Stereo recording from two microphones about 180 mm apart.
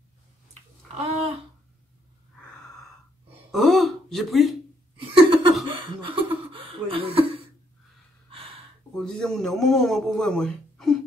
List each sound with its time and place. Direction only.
3.5 s throat clearing: centre (ahead or behind)
4.9 s laughter: 30° right (ahead or behind)
8.9 s a man's voice: 5° left (ahead or behind)